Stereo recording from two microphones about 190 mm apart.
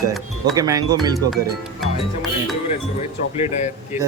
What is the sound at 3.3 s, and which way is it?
Speech, 35° left (ahead or behind).